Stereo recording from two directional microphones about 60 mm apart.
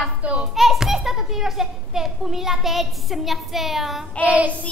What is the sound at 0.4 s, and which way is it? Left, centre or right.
A child's voice, centre.